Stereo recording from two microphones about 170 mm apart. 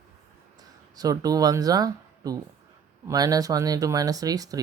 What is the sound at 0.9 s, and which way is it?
Speech, 20° right (ahead or behind).